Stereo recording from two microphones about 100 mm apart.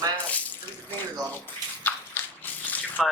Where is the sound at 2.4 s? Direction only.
20° left (ahead or behind).